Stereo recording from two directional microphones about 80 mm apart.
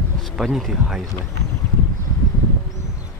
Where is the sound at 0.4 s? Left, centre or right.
Centre.